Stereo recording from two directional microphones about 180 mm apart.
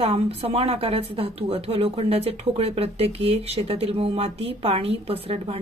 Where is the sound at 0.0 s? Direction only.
30° right (ahead or behind).